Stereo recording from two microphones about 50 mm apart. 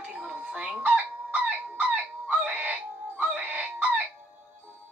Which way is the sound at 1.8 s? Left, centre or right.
Right.